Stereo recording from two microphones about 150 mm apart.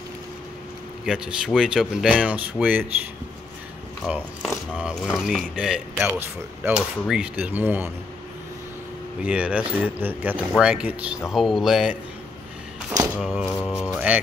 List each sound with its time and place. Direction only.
1.0 s speech: 5° right (ahead or behind)
4.7 s speech: 5° right (ahead or behind)
6.1 s speech: 15° right (ahead or behind)
9.2 s speech: 10° right (ahead or behind)
13.2 s speech: centre (ahead or behind)
13.6 s speech: 10° left (ahead or behind)
13.9 s speech: 10° right (ahead or behind)